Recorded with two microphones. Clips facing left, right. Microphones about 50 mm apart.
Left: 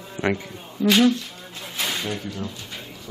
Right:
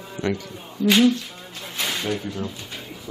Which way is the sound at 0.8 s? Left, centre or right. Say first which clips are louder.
Even; centre.